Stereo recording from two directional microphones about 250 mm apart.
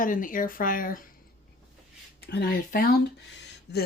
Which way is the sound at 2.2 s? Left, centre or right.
Left.